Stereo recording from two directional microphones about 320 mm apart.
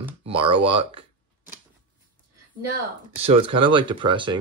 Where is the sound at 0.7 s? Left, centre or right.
Centre.